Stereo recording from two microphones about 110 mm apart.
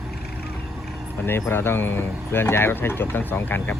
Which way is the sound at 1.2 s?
20° left (ahead or behind).